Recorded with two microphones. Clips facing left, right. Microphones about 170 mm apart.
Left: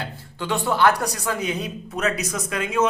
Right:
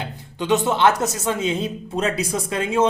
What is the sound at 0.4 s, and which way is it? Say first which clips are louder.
A man's voice: right 2 dB; 20° right (ahead or behind).